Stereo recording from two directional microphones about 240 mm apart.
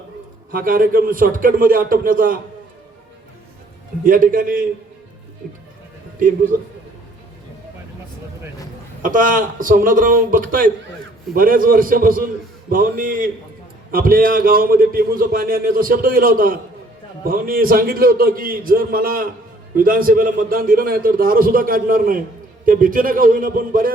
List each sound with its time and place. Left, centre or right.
0.5 s a man's voice: right
4.0 s a man's voice: right
6.1 s a man's voice: right
9.0 s a man's voice: right